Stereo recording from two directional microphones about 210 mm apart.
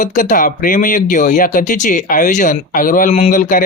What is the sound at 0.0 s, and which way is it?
Speech, 35° left (ahead or behind).